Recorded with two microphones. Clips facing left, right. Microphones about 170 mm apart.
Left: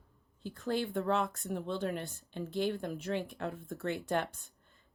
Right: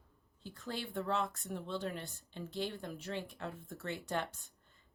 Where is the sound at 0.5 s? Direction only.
50° left (ahead or behind).